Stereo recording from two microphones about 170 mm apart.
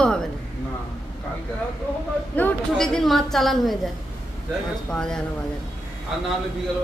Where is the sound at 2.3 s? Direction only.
5° left (ahead or behind).